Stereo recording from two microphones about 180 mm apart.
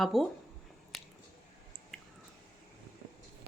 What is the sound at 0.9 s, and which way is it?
Squish, centre (ahead or behind).